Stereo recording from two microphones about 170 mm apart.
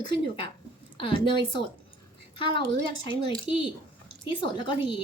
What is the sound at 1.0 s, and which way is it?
A woman's voice, 30° left (ahead or behind).